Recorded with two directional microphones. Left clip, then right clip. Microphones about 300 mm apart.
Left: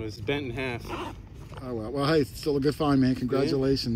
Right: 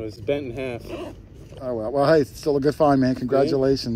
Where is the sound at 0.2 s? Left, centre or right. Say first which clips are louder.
Right 5 dB; left.